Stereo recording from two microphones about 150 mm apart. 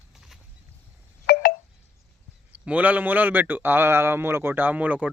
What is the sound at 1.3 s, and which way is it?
Telephone dialing, 90° left.